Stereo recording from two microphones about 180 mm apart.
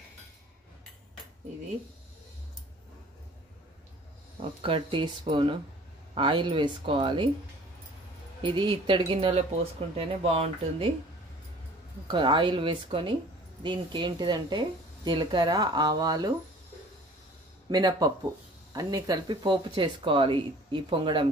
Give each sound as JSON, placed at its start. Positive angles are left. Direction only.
{"t": 4.4, "sound": "speech", "side_deg": -30}
{"t": 8.4, "sound": "speech", "side_deg": -25}
{"t": 12.1, "sound": "speech", "side_deg": -25}
{"t": 17.6, "sound": "speech", "side_deg": -20}